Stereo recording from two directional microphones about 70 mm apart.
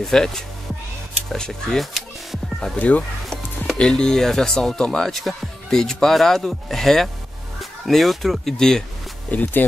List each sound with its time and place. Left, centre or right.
0.0 s speech: centre
3.3 s speech: centre
9.3 s speech: left